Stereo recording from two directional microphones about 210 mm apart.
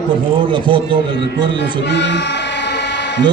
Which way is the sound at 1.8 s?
55° left (ahead or behind).